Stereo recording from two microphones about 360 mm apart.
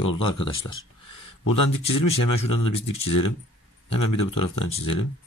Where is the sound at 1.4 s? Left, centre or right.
Left.